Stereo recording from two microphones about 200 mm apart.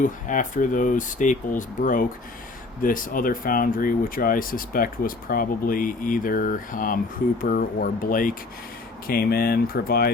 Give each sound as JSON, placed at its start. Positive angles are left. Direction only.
{"t": 0.0, "sound": "speech", "side_deg": 40}